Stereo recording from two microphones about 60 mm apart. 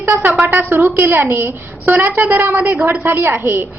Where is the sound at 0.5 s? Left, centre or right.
Right.